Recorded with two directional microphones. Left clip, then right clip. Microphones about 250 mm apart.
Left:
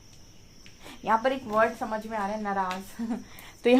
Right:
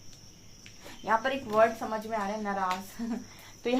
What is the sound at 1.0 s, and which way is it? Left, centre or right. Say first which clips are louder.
A woman's voice: left 3 dB; left.